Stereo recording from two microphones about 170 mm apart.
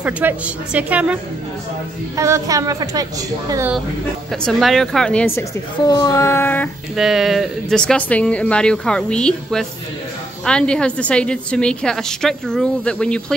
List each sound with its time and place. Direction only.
0.0 s a woman's voice: 10° right (ahead or behind)
4.3 s a woman's voice: centre (ahead or behind)
5.9 s a sound: 20° left (ahead or behind)
7.0 s a woman's voice: centre (ahead or behind)